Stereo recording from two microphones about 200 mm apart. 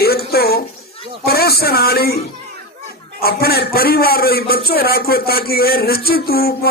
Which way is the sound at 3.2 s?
50° left (ahead or behind).